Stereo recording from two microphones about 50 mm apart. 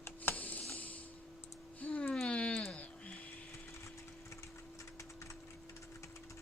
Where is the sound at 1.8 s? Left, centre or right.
Left.